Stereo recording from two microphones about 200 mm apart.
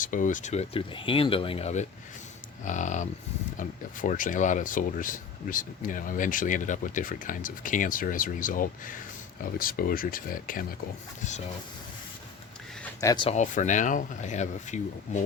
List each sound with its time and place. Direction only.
0.0 s speech: 40° left (ahead or behind)
13.0 s speech: 15° left (ahead or behind)
13.2 s speech: 35° left (ahead or behind)